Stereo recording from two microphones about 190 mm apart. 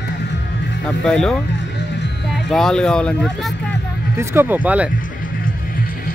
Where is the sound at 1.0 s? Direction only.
5° left (ahead or behind).